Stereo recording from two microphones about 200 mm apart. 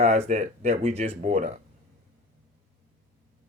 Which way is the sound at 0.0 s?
35° right (ahead or behind).